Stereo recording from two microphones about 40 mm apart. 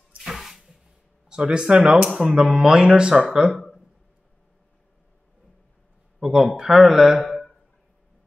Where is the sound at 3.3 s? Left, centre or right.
Centre.